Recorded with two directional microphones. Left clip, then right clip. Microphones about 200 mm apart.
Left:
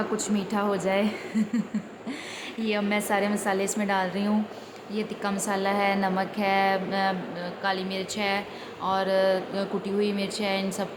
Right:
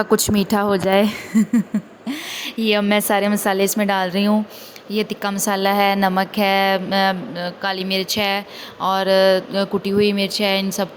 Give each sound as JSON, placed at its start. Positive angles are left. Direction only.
{"t": 0.2, "sound": "a woman's voice", "side_deg": -45}